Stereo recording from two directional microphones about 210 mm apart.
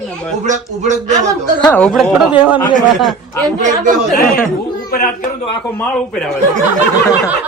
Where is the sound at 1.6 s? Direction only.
5° left (ahead or behind).